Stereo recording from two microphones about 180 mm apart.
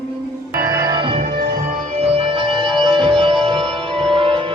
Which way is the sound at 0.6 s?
15° right (ahead or behind).